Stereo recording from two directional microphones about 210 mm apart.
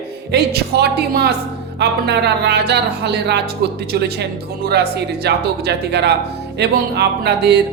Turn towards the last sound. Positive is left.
turn(degrees=-55)  # may be behind; listen again after turning